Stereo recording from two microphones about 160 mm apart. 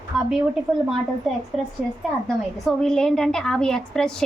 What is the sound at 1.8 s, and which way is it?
A woman's voice, 5° right (ahead or behind).